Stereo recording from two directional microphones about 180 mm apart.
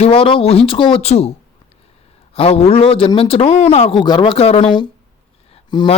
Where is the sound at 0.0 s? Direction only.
30° left (ahead or behind).